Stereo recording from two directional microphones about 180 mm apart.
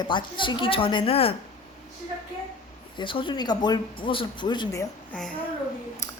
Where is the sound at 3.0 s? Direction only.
25° left (ahead or behind).